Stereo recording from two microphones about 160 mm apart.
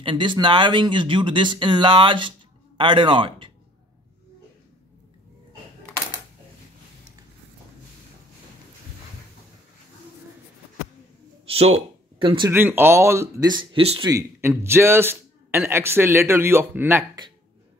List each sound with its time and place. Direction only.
0.0 s speech: 30° right (ahead or behind)
11.4 s a sound: 40° right (ahead or behind)
12.2 s speech: 30° right (ahead or behind)
12.4 s a man's voice: 15° right (ahead or behind)
13.5 s speech: 30° right (ahead or behind)
14.1 s a man's voice: 15° right (ahead or behind)